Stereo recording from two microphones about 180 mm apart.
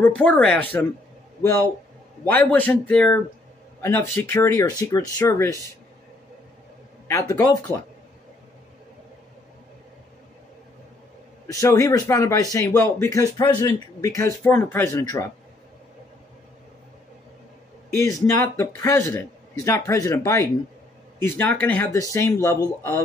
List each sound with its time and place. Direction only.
0.0 s a man's voice: 10° left (ahead or behind)
2.2 s a man's voice: 10° left (ahead or behind)
7.1 s speech: 20° left (ahead or behind)
11.4 s a man's voice: 20° left (ahead or behind)
17.9 s a man's voice: 15° left (ahead or behind)